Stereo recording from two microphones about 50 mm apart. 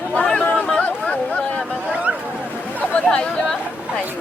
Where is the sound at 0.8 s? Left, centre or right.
Left.